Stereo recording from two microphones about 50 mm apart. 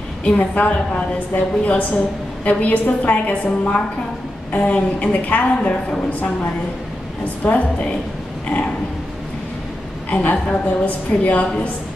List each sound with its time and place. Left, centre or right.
0.4 s a woman's voice: left
7.4 s a woman's voice: left
10.0 s a woman's voice: left